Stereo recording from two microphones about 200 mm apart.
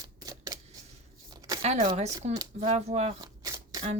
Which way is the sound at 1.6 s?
30° right (ahead or behind).